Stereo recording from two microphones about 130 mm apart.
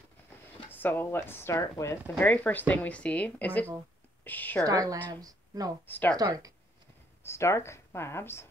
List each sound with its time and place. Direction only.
0.7 s speech: 15° left (ahead or behind)
2.1 s a woman's voice: 10° left (ahead or behind)
4.6 s speech: 25° right (ahead or behind)
5.9 s speech: 15° left (ahead or behind)
6.1 s speech: 30° right (ahead or behind)
7.2 s speech: 20° left (ahead or behind)